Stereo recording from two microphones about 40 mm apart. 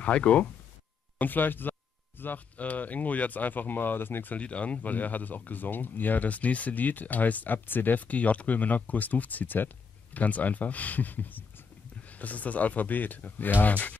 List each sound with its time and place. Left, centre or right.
0.0 s speech: left
1.1 s a sound: left
2.5 s speech: left
4.4 s speech: left